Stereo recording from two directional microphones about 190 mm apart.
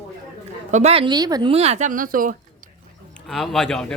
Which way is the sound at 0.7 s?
35° right (ahead or behind).